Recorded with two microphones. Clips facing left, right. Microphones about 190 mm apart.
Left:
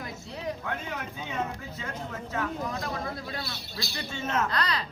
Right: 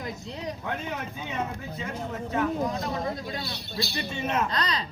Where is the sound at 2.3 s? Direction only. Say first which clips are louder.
Right 5 dB; 20° right (ahead or behind).